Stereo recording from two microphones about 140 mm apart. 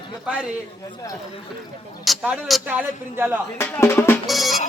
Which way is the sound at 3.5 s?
15° left (ahead or behind).